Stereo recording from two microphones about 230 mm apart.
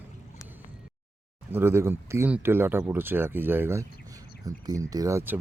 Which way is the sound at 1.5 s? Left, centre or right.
Centre.